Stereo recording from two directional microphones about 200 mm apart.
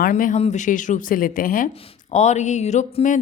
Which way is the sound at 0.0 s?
40° left (ahead or behind).